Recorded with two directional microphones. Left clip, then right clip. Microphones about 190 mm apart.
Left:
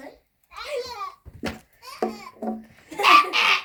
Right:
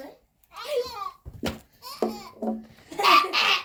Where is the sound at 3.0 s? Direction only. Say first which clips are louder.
Left 3 dB; 35° left (ahead or behind).